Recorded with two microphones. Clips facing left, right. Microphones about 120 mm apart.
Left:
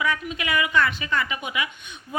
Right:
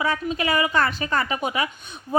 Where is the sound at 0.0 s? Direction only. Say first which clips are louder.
Right 3 dB; 35° right (ahead or behind).